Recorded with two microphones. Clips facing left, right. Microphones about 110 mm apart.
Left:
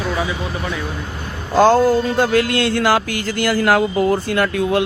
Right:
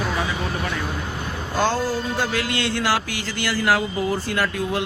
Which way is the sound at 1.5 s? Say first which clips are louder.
Left 10 dB; 45° left (ahead or behind).